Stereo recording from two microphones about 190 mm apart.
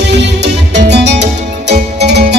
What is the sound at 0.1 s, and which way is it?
Music, 65° right (ahead or behind).